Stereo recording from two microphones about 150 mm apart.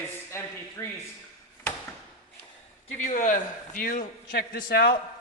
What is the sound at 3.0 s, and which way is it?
A man's voice, 55° left (ahead or behind).